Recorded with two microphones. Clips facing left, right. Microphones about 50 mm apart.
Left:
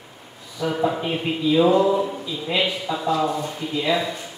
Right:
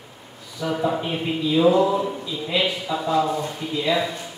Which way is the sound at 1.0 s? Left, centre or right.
Centre.